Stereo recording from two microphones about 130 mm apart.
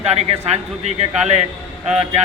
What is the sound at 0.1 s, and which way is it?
A man's voice, 55° right (ahead or behind).